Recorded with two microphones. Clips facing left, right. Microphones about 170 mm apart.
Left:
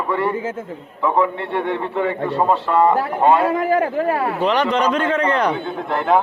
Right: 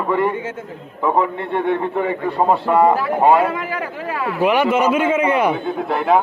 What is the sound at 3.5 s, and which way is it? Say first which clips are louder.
Speech: left 7 dB; 45° left (ahead or behind).